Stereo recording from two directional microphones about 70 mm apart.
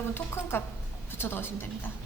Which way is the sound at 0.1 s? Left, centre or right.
Left.